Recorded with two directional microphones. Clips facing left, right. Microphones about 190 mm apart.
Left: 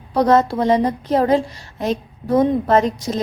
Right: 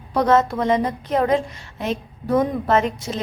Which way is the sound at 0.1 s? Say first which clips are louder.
Left 2 dB; 35° left (ahead or behind).